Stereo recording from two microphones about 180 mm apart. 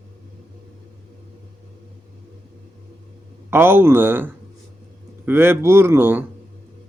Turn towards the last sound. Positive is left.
turn(degrees=-10)  # may be behind; listen again after turning